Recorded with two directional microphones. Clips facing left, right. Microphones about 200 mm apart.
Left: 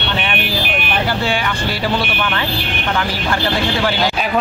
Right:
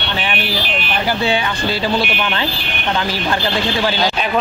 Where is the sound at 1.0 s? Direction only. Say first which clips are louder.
Right 4 dB; 20° right (ahead or behind).